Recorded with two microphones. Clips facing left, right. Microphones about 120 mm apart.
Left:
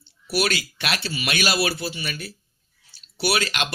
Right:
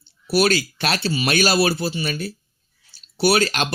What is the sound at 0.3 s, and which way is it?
Speech, 35° right (ahead or behind).